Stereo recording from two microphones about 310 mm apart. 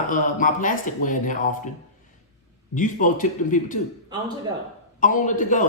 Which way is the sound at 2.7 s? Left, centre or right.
Left.